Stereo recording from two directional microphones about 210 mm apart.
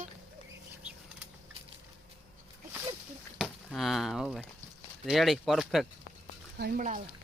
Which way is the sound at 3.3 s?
Centre (ahead or behind).